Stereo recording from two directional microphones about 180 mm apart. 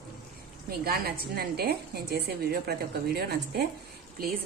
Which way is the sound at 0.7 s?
60° right (ahead or behind).